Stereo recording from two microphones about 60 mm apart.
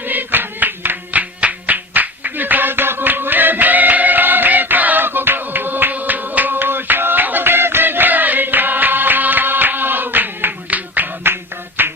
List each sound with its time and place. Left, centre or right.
0.1 s music: right